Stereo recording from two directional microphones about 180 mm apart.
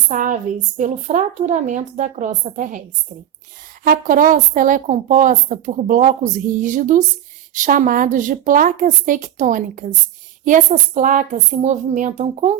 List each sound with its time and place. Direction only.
0.1 s a sound: 45° right (ahead or behind)
0.8 s a woman's voice: 40° right (ahead or behind)
3.8 s a woman's voice: 50° right (ahead or behind)